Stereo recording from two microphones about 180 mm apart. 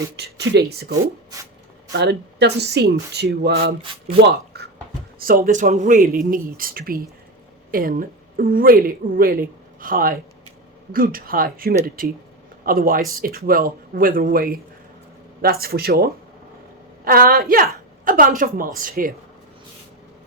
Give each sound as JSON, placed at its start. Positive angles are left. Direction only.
{"t": 0.2, "sound": "speech", "side_deg": -65}
{"t": 1.9, "sound": "speech", "side_deg": -70}
{"t": 5.2, "sound": "a woman's voice", "side_deg": -55}